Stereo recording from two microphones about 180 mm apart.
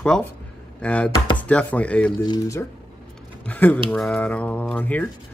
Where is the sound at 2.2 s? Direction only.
20° left (ahead or behind).